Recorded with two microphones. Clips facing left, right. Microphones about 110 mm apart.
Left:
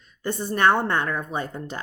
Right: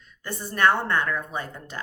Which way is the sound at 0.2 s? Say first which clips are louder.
Left 2 dB; 25° left (ahead or behind).